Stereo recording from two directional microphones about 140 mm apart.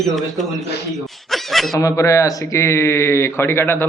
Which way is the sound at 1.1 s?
Centre (ahead or behind).